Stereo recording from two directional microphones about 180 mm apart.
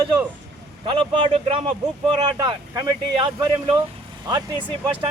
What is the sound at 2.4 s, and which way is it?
Speech, 20° right (ahead or behind).